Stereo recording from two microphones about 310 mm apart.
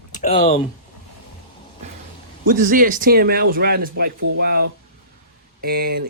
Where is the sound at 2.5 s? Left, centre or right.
Right.